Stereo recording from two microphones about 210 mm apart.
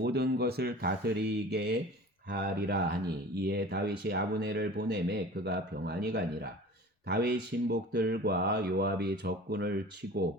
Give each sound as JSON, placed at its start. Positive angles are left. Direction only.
{"t": 0.0, "sound": "speech", "side_deg": -50}